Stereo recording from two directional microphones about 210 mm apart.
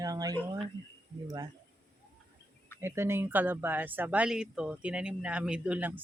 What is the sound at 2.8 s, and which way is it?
Speech, 10° right (ahead or behind).